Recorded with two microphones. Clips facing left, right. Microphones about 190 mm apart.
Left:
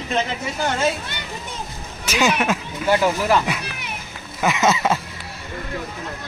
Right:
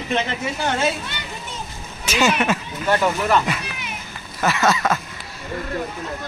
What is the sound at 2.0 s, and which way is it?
Speech, 10° left (ahead or behind).